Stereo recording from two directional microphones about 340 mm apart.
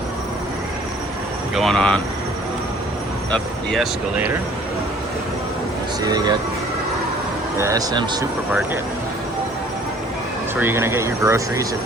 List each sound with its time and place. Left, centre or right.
1.5 s speech: centre
3.3 s speech: centre
6.0 s speech: centre
7.6 s speech: centre
10.6 s speech: centre